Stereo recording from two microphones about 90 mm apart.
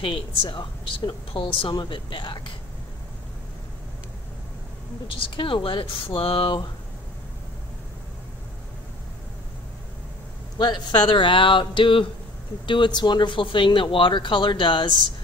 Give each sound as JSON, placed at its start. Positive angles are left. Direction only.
{"t": 0.0, "sound": "a woman's voice", "side_deg": 70}
{"t": 1.7, "sound": "speech", "side_deg": 60}
{"t": 5.0, "sound": "a woman's voice", "side_deg": 70}
{"t": 10.6, "sound": "a woman's voice", "side_deg": 55}